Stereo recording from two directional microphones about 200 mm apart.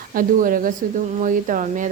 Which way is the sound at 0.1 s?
45° right (ahead or behind).